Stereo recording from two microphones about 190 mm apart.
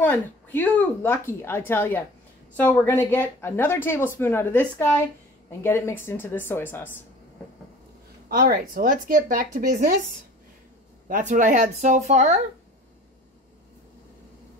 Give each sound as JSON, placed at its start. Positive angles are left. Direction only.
{"t": 0.0, "sound": "a woman's voice", "side_deg": 10}
{"t": 8.3, "sound": "speech", "side_deg": -50}
{"t": 11.1, "sound": "speech", "side_deg": -45}